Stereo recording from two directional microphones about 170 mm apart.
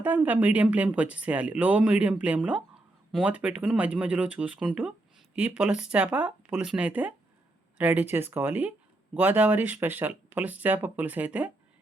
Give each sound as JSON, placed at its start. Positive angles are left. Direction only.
{"t": 0.0, "sound": "speech", "side_deg": -10}